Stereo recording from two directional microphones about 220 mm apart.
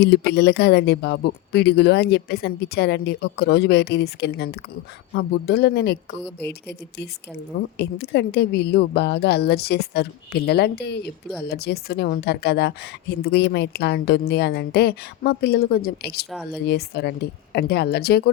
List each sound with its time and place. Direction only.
0.0 s a woman's voice: 50° left (ahead or behind)